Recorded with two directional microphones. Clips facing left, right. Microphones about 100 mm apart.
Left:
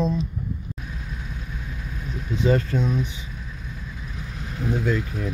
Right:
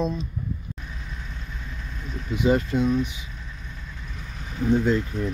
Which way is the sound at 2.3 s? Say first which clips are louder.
Even; 15° right (ahead or behind).